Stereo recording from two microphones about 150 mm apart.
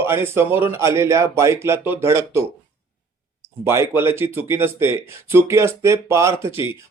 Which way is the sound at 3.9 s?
15° right (ahead or behind).